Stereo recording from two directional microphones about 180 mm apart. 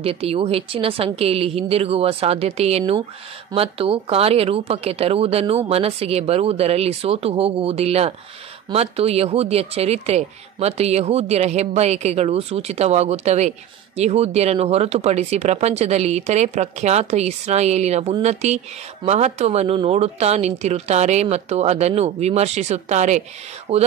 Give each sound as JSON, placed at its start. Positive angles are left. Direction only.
{"t": 0.0, "sound": "speech", "side_deg": -35}